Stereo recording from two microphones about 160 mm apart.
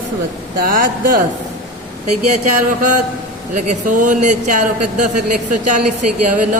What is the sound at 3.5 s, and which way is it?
Speech, 55° right (ahead or behind).